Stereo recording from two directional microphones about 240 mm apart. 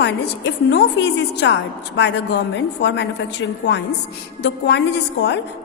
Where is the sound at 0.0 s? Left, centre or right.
Left.